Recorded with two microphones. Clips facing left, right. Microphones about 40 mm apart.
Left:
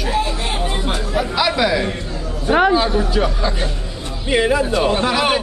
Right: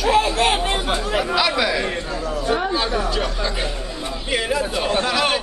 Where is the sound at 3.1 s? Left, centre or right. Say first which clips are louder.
Left 4 dB; centre.